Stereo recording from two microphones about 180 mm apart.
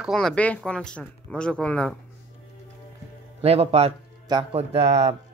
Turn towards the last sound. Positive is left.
turn(degrees=-35)  # may be behind; listen again after turning